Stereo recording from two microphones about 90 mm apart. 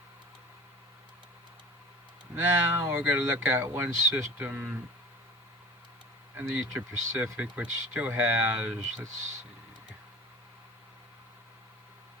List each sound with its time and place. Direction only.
2.3 s speech: 25° right (ahead or behind)
6.3 s speech: 25° right (ahead or behind)